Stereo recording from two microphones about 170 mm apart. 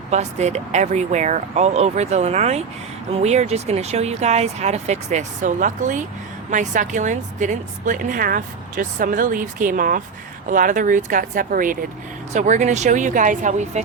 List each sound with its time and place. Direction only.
0.1 s a woman's voice: 40° right (ahead or behind)